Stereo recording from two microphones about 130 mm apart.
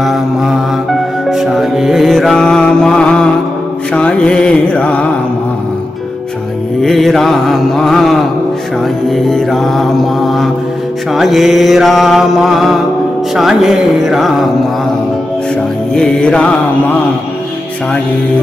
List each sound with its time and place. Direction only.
0.0 s music: centre (ahead or behind)
3.9 s mantra: 5° left (ahead or behind)
6.8 s mantra: centre (ahead or behind)
15.9 s music: 5° left (ahead or behind)